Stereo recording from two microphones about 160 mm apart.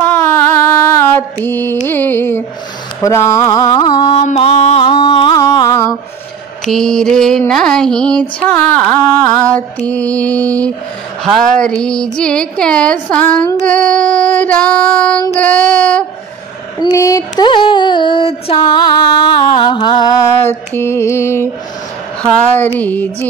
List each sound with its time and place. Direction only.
0.0 s mantra: 10° left (ahead or behind)
1.9 s music: 15° left (ahead or behind)
3.0 s carnatic music: 20° left (ahead or behind)
4.2 s music: 45° left (ahead or behind); by 5.8 s 20° left (ahead or behind)
6.6 s a sound: centre (ahead or behind)
9.8 s child singing: 10° left (ahead or behind)
11.3 s a sound: 5° left (ahead or behind)
13.1 s child singing: 10° left (ahead or behind)
16.8 s a sound: 20° left (ahead or behind)
20.3 s child singing: 15° left (ahead or behind)